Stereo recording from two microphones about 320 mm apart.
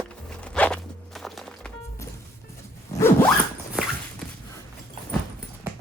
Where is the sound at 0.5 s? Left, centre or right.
Centre.